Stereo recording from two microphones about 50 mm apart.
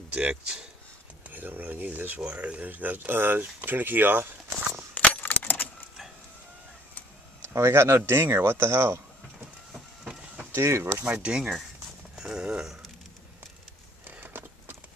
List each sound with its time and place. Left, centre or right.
0.1 s speech: right
1.3 s speech: right
3.1 s speech: right
4.9 s coin: left
7.4 s speech: right
9.8 s a sound: centre
10.5 s speech: right
11.2 s speech: centre
14.2 s a sound: right